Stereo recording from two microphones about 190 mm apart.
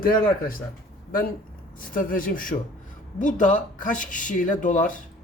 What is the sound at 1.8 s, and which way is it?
Speech, 45° left (ahead or behind).